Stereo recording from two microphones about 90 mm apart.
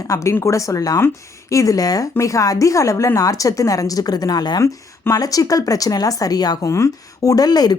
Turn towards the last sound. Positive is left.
turn(degrees=50)  # may be behind; listen again after turning